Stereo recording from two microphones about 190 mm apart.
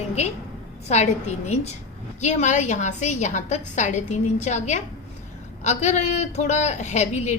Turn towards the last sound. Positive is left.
turn(degrees=35)  # may be behind; listen again after turning